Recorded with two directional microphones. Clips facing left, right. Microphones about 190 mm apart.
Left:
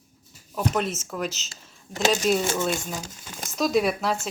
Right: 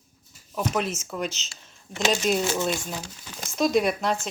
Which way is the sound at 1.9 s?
45° left (ahead or behind).